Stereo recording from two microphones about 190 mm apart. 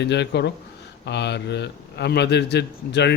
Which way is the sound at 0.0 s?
65° left (ahead or behind).